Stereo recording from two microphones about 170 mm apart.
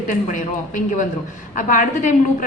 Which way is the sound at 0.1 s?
50° left (ahead or behind).